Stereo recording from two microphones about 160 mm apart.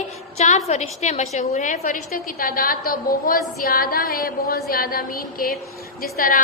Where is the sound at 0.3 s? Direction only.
45° left (ahead or behind).